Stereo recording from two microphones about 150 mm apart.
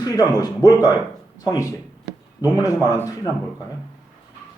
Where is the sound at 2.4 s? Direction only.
25° left (ahead or behind).